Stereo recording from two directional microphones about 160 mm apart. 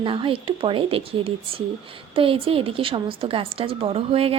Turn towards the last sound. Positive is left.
turn(degrees=-35)  # may be behind; listen again after turning